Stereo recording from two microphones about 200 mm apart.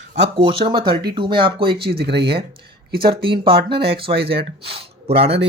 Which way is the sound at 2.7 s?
50° right (ahead or behind).